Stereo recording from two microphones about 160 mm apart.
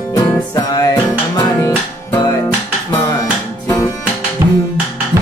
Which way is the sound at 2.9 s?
25° left (ahead or behind).